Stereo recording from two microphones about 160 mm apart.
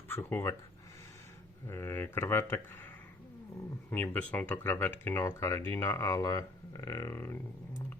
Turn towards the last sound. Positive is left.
turn(degrees=15)  # may be behind; listen again after turning